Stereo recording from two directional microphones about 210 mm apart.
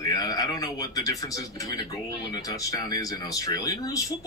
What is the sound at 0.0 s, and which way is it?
Speech, 20° left (ahead or behind).